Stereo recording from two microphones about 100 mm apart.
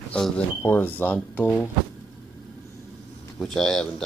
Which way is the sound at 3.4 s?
Centre (ahead or behind).